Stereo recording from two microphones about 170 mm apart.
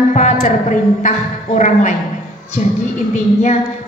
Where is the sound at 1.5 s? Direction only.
45° left (ahead or behind).